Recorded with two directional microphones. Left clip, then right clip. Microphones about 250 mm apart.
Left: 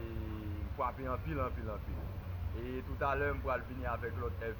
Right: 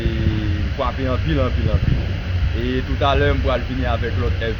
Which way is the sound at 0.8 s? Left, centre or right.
Left.